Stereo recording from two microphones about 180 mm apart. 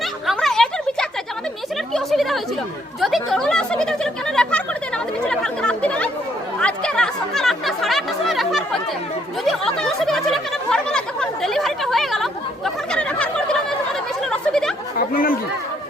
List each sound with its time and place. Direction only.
0.3 s a sound: centre (ahead or behind)
3.0 s speech: centre (ahead or behind)
5.2 s chatter: 5° left (ahead or behind)
9.4 s a sound: centre (ahead or behind)
14.3 s chatter: 5° left (ahead or behind)
14.9 s chatter: 50° left (ahead or behind)